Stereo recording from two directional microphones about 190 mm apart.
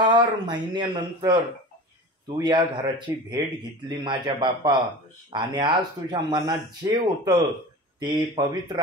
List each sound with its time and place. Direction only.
0.0 s speech: 25° right (ahead or behind)